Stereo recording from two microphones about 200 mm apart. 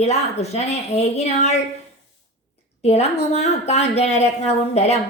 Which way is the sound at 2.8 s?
30° left (ahead or behind).